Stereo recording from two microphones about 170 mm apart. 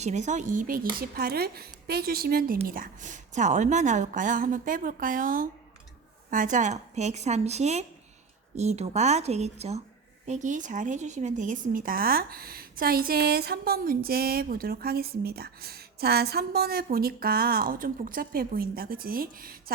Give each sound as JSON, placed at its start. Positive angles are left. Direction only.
{"t": 0.0, "sound": "a woman's voice", "side_deg": -45}